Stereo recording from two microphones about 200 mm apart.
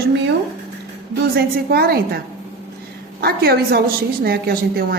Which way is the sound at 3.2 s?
50° right (ahead or behind).